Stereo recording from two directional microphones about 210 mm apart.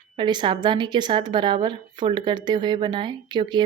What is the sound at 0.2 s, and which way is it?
A woman's voice, 20° right (ahead or behind).